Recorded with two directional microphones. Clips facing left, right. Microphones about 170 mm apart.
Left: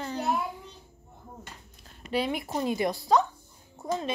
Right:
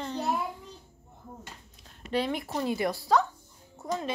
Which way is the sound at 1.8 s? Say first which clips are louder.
Even; 10° left (ahead or behind).